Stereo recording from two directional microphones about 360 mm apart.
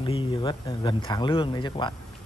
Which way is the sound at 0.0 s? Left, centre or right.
Centre.